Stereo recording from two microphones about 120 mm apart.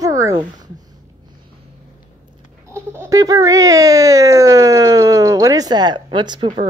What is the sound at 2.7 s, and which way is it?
A child's voice, 20° right (ahead or behind).